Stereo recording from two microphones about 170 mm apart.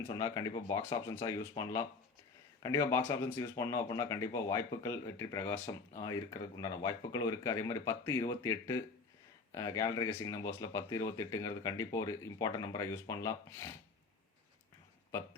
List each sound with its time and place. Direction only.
0.1 s speech: 20° left (ahead or behind)